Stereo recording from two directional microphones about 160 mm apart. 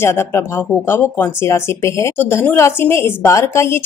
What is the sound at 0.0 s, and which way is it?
Speech, 15° left (ahead or behind).